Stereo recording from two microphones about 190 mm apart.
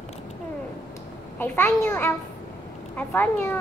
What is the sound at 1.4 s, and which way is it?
A child's voice, 10° left (ahead or behind).